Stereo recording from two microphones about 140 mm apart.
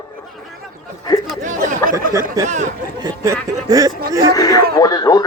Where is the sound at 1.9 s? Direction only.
20° right (ahead or behind).